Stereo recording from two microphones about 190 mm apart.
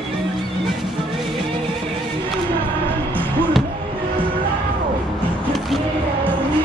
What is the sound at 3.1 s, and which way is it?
Music, 10° right (ahead or behind).